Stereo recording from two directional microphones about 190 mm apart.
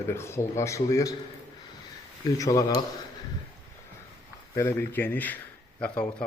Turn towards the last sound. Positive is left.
turn(degrees=5)  # may be behind; listen again after turning